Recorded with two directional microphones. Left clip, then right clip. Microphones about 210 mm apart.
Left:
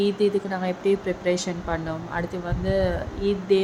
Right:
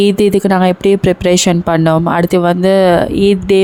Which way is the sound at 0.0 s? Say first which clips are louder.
Right 12 dB; 50° right (ahead or behind).